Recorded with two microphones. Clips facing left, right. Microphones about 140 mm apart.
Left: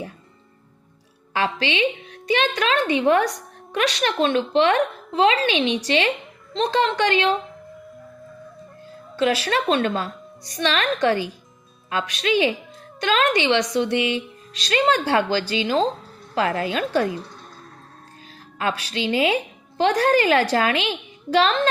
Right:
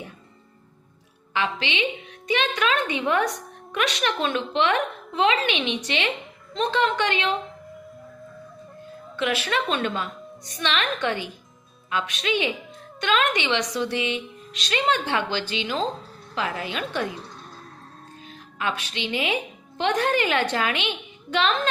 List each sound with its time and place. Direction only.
1.3 s a woman's voice: 35° left (ahead or behind)
9.1 s a woman's voice: 35° left (ahead or behind)
13.8 s speech: 30° right (ahead or behind)
14.5 s a woman's voice: 35° left (ahead or behind)
16.3 s a woman's voice: 50° left (ahead or behind)
16.7 s a woman's voice: 35° left (ahead or behind)
18.6 s a woman's voice: 35° left (ahead or behind)